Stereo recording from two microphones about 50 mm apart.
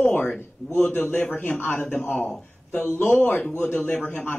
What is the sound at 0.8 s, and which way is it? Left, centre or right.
A man's voice, left.